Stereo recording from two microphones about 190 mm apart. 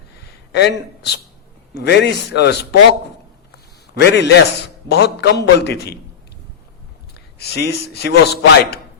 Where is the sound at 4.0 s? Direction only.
65° left (ahead or behind).